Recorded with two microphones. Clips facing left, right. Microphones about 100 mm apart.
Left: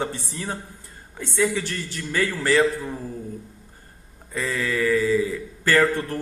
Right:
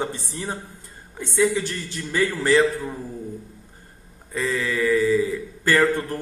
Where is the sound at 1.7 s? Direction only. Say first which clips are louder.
Even; 20° right (ahead or behind).